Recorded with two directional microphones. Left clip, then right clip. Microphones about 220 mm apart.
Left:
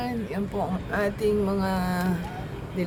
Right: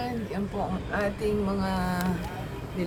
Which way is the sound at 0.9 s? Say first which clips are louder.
Left 4 dB; 45° left (ahead or behind).